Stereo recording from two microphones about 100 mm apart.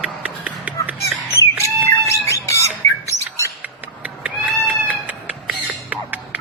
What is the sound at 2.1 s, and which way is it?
Squawk, 30° left (ahead or behind).